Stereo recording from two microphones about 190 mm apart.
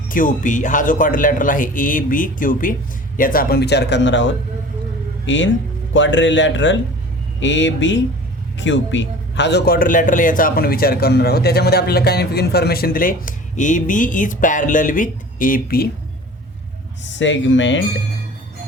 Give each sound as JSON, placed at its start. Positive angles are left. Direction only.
{"t": 0.1, "sound": "speech", "side_deg": 45}
{"t": 17.0, "sound": "speech", "side_deg": 75}